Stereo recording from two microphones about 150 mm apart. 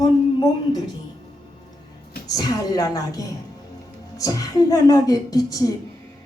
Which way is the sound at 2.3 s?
25° left (ahead or behind).